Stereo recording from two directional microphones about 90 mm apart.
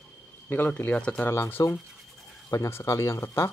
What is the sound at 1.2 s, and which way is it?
Speech, 25° left (ahead or behind).